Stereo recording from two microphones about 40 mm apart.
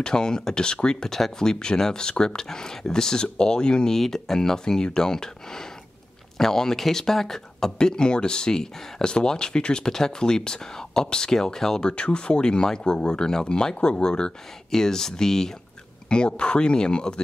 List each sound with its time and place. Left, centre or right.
0.0 s speech: centre
11.8 s speech: left
16.1 s speech: left